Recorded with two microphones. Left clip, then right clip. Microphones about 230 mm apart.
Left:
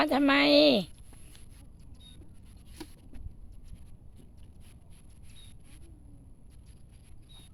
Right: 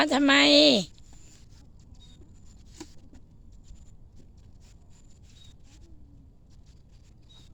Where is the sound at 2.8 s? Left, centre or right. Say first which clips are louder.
Right 1 dB; left.